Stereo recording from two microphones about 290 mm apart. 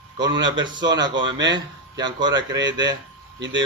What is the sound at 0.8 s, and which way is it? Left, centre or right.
A man's voice, right.